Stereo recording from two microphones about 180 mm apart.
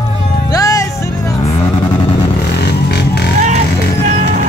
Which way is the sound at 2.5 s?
65° left (ahead or behind).